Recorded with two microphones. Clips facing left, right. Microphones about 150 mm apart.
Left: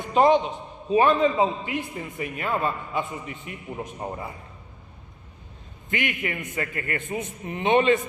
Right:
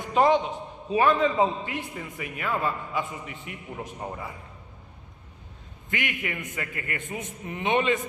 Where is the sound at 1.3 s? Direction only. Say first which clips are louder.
Left 1 dB; 15° left (ahead or behind).